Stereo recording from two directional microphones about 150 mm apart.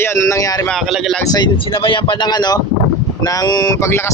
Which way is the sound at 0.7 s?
Centre (ahead or behind).